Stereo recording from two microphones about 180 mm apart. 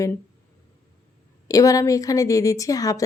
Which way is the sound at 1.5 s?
20° left (ahead or behind).